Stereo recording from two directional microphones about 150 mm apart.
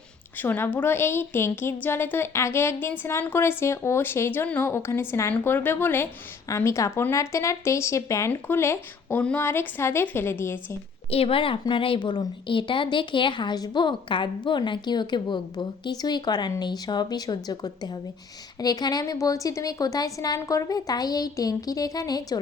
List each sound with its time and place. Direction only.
0.3 s a woman's voice: 15° left (ahead or behind)
11.1 s a woman's voice: 40° left (ahead or behind)